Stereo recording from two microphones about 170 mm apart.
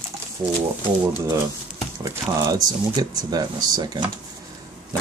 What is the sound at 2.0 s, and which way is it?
Speech, 20° right (ahead or behind).